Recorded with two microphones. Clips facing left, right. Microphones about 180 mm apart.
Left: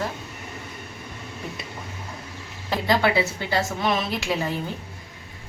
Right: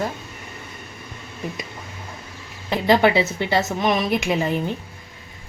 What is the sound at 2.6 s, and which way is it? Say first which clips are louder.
A woman's voice: right 5 dB; 20° right (ahead or behind).